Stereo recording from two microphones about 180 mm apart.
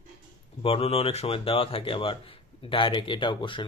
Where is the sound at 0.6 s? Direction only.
30° left (ahead or behind).